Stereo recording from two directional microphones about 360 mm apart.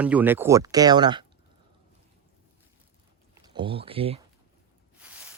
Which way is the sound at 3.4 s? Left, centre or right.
Centre.